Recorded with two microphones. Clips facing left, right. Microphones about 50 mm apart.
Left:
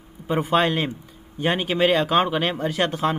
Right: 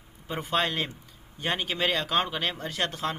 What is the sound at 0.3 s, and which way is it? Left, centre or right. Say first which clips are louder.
Speech: left 8 dB; centre.